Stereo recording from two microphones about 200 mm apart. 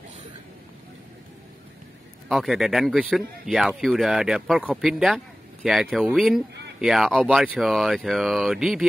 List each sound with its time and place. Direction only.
2.2 s speech: centre (ahead or behind)